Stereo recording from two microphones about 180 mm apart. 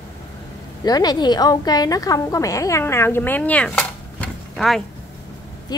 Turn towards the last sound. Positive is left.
turn(degrees=0)  # may be behind; listen again after turning